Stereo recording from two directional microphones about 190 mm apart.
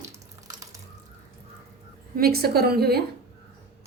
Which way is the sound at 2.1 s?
55° right (ahead or behind).